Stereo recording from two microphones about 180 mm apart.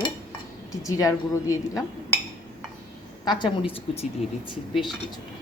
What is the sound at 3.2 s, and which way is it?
Speech, 25° left (ahead or behind).